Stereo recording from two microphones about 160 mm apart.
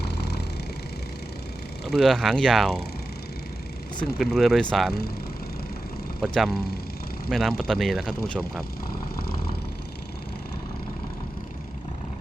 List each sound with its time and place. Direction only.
0.0 s a sound: 90° left
2.0 s speech: centre (ahead or behind)
4.2 s speech: centre (ahead or behind)
6.2 s speech: centre (ahead or behind)